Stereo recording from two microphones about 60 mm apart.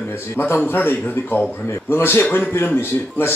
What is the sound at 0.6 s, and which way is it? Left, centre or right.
Speech, left.